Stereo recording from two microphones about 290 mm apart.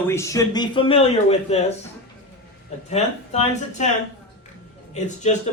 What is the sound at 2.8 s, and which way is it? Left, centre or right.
Speech, left.